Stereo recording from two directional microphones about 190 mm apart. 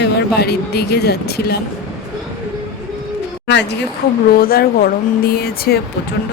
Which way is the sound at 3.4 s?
65° left (ahead or behind).